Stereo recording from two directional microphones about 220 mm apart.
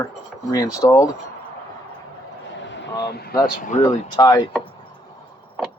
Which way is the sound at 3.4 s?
35° left (ahead or behind).